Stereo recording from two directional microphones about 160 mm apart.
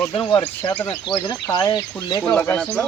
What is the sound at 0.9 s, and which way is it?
Speech, 25° left (ahead or behind).